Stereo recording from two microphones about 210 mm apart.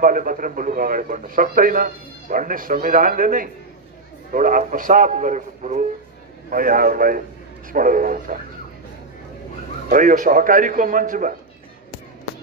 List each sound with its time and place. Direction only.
0.0 s a man's voice: 40° right (ahead or behind)
9.8 s a man's voice: 40° right (ahead or behind)